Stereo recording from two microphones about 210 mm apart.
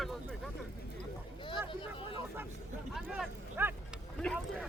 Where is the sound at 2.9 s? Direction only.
5° right (ahead or behind).